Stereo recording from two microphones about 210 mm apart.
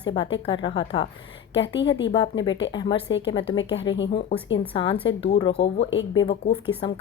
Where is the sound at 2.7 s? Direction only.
20° left (ahead or behind).